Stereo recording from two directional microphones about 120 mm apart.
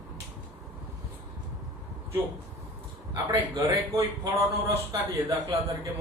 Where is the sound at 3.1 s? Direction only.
30° right (ahead or behind).